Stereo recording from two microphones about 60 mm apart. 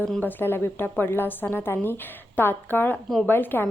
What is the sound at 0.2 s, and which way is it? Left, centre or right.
A woman's voice, left.